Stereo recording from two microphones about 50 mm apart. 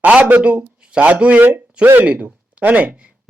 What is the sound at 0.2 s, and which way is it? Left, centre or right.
Speech, right.